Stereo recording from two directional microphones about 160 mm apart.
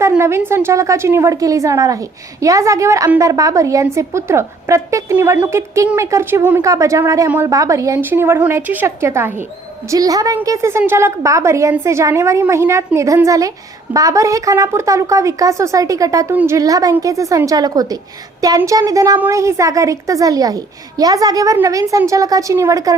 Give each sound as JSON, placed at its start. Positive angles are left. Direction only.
{"t": 0.2, "sound": "a woman's voice", "side_deg": -15}
{"t": 16.3, "sound": "a woman's voice", "side_deg": -10}
{"t": 16.6, "sound": "a woman's voice", "side_deg": -20}